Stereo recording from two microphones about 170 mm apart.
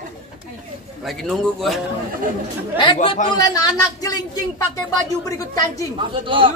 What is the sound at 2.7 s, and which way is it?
Speech, 30° left (ahead or behind).